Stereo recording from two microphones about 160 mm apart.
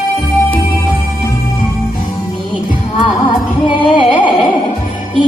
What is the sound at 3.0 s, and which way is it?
Music, 30° left (ahead or behind).